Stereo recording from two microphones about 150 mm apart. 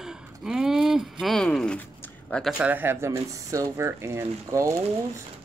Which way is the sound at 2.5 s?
10° right (ahead or behind).